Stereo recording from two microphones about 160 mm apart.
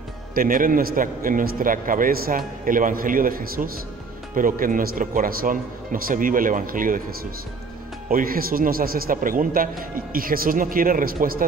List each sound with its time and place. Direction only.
0.3 s a man's voice: 60° right (ahead or behind)
8.1 s a man's voice: 65° right (ahead or behind)